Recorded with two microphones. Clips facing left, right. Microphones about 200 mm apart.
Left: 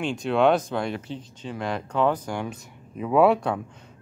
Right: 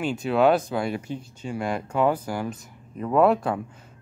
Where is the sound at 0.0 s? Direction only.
5° right (ahead or behind).